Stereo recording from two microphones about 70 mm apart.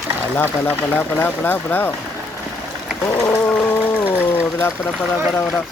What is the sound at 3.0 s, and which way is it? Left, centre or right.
Gargling, left.